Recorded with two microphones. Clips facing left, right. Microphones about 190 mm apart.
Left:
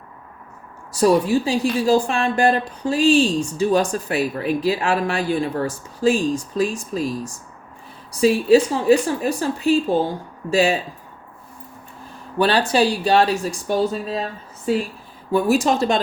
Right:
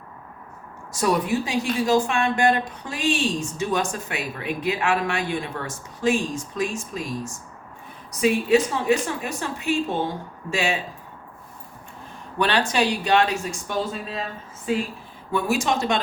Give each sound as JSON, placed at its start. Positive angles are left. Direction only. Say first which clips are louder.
{"t": 0.9, "sound": "speech", "louder": "left 6 dB", "side_deg": 30}
{"t": 12.4, "sound": "speech", "louder": "left 5 dB", "side_deg": 35}
{"t": 15.3, "sound": "speech", "louder": "left 5 dB", "side_deg": 35}